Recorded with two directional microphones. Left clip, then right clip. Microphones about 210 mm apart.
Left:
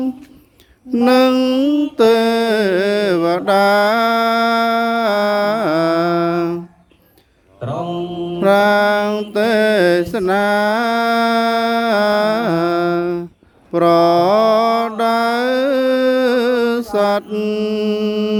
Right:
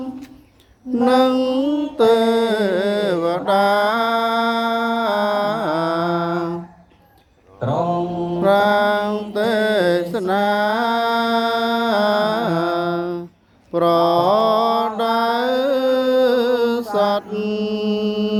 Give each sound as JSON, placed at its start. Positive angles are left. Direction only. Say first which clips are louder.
{"t": 1.0, "sound": "mantra", "louder": "left 3 dB", "side_deg": 50}
{"t": 7.6, "sound": "mantra", "louder": "right 3 dB", "side_deg": 5}
{"t": 8.4, "sound": "mantra", "louder": "left 3 dB", "side_deg": 50}